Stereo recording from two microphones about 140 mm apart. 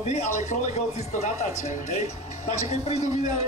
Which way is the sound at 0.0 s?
50° left (ahead or behind).